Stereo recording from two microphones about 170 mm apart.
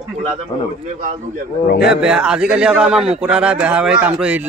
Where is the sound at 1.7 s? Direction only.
70° left (ahead or behind).